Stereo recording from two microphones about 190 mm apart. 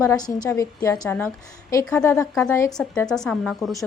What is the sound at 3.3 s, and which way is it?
Speech, 5° left (ahead or behind).